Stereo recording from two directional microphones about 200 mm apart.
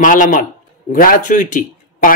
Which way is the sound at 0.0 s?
40° left (ahead or behind).